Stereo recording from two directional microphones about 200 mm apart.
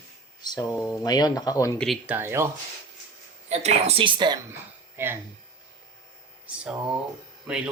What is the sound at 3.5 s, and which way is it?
Speech, 35° right (ahead or behind).